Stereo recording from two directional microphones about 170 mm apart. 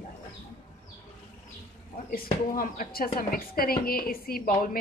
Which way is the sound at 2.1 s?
55° left (ahead or behind).